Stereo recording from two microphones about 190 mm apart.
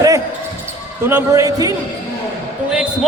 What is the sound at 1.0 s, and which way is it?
Speech, 15° right (ahead or behind).